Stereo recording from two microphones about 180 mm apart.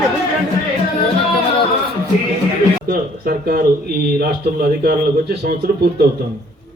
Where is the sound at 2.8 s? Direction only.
55° right (ahead or behind).